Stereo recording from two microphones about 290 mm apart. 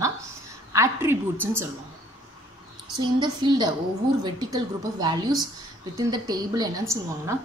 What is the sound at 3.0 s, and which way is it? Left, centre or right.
A woman's voice, centre.